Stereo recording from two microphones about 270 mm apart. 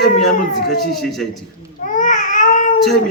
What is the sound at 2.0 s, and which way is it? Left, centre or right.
Baby cry, left.